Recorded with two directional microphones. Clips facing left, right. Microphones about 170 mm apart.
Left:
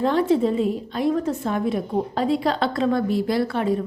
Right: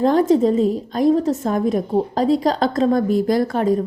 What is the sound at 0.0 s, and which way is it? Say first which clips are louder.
A woman's voice: right 4 dB; 40° right (ahead or behind).